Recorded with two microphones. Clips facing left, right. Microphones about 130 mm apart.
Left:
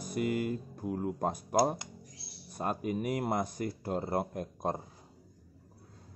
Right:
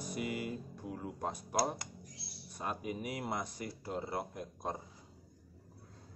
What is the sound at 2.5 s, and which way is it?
Speech, 50° left (ahead or behind).